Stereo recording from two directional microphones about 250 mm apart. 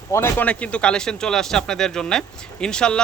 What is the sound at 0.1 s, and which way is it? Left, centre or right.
Speech, centre.